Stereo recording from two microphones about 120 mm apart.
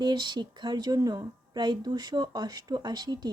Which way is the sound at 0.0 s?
35° right (ahead or behind).